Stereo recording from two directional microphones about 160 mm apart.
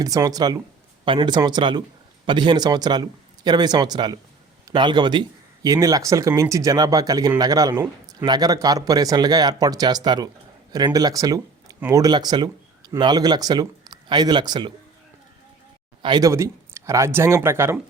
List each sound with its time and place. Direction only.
0.0 s speech: 20° right (ahead or behind)
16.0 s speech: 30° right (ahead or behind)
16.3 s speech: 15° right (ahead or behind)